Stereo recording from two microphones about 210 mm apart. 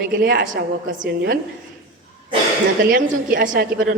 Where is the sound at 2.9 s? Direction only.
45° right (ahead or behind).